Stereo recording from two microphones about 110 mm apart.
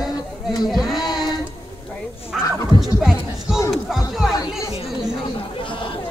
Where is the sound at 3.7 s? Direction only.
Centre (ahead or behind).